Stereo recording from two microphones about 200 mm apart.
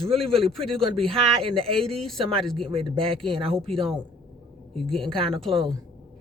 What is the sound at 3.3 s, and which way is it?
Speech, 25° right (ahead or behind).